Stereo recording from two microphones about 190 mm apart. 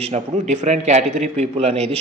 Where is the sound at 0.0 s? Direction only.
35° right (ahead or behind).